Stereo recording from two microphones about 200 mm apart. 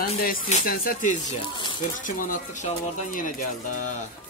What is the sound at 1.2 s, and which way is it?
Speech, 20° left (ahead or behind).